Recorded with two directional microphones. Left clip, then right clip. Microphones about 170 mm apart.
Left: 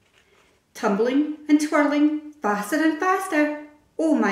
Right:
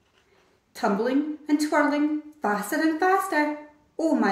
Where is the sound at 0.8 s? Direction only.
20° right (ahead or behind).